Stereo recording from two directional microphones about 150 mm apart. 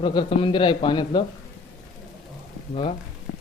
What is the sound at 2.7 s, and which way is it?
Speech, 45° left (ahead or behind).